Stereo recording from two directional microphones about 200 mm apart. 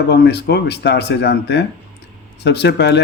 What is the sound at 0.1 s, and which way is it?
Speech, 55° left (ahead or behind).